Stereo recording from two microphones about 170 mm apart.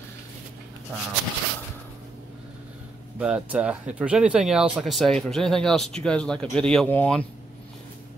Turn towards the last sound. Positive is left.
turn(degrees=10)  # may be behind; listen again after turning